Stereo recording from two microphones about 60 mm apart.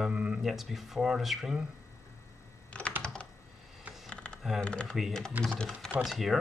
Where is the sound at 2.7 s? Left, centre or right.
Left.